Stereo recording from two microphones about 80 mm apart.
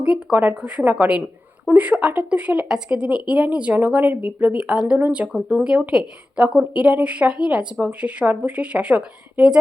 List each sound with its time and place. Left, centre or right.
0.0 s a woman's voice: centre